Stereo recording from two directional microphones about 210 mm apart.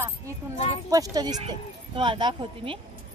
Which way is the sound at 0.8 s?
20° right (ahead or behind).